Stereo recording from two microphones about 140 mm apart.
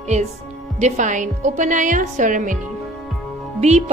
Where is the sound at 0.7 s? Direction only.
55° right (ahead or behind).